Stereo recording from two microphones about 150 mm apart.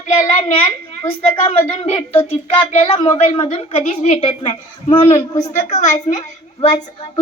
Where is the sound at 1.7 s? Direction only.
45° left (ahead or behind).